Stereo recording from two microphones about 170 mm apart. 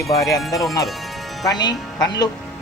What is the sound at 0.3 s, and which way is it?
Speech, 20° left (ahead or behind).